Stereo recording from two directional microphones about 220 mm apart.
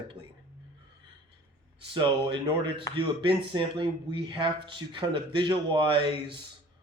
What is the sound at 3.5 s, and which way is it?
Speech, 20° right (ahead or behind).